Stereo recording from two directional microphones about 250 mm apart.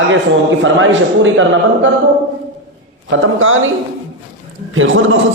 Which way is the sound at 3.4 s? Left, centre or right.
Right.